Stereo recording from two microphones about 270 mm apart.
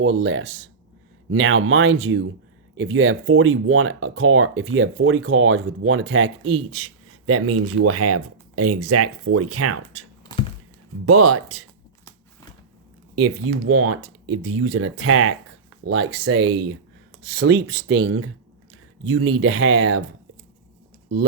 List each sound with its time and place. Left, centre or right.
0.0 s speech: right
11.0 s speech: right
13.1 s speech: right